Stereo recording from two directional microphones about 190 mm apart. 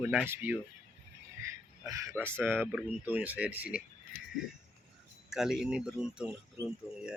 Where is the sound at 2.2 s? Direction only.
10° right (ahead or behind).